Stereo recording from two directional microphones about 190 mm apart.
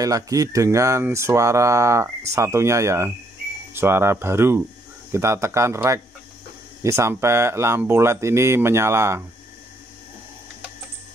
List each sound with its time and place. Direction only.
0.0 s speech: 20° right (ahead or behind)